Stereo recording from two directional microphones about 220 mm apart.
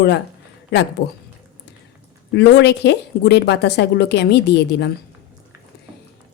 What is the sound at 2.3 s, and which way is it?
Speech, 50° left (ahead or behind).